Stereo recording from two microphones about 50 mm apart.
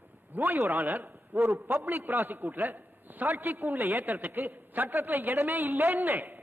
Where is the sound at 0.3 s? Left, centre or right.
Right.